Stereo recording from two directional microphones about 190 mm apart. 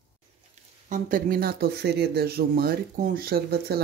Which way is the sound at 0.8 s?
45° right (ahead or behind).